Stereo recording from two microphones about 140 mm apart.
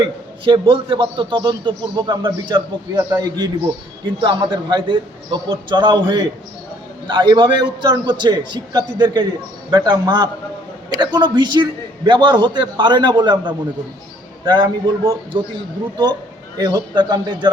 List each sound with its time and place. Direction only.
0.0 s a man's voice: 35° right (ahead or behind)
2.9 s a man's voice: 20° right (ahead or behind)
4.0 s a man's voice: 35° right (ahead or behind)
16.6 s a man's voice: 30° right (ahead or behind)